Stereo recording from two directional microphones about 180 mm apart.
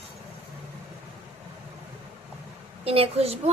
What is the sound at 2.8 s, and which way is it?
Speech, 35° right (ahead or behind).